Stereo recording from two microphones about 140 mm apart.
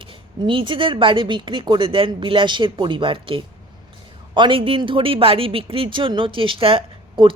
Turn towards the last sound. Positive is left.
turn(degrees=-40)  # may be behind; listen again after turning